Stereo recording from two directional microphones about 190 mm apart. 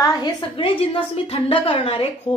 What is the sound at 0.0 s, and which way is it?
A woman's voice, 20° left (ahead or behind).